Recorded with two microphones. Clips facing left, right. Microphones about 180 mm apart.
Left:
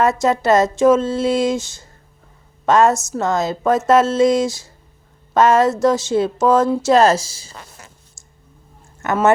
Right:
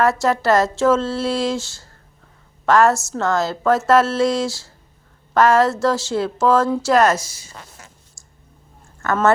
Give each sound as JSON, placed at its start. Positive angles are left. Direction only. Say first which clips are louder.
{"t": 0.0, "sound": "a woman's voice", "louder": "left 1 dB", "side_deg": 20}
{"t": 8.2, "sound": "a sound", "louder": "left 2 dB", "side_deg": 20}
{"t": 9.0, "sound": "speech", "louder": "left 1 dB", "side_deg": 20}